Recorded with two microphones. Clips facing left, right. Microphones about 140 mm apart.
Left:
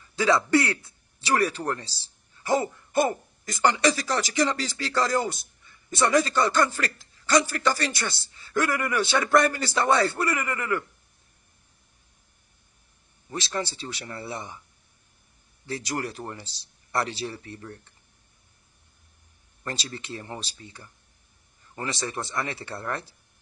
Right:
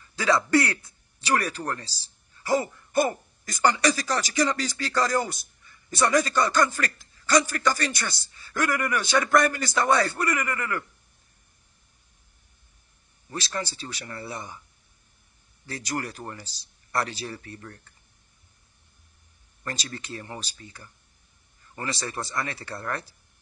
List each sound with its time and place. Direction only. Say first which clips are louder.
0.1 s speech: left 1 dB; 20° left (ahead or behind)
13.3 s speech: left 2 dB; 20° left (ahead or behind)
15.6 s speech: left 1 dB; 25° left (ahead or behind)
19.6 s speech: left 1 dB; 25° left (ahead or behind)